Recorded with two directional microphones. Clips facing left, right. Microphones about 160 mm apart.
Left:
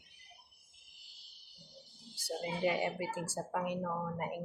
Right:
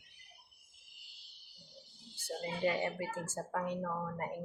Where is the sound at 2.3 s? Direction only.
15° left (ahead or behind).